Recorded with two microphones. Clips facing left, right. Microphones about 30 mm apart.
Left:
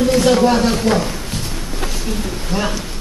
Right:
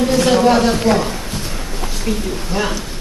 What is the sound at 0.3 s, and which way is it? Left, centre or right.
Speech, centre.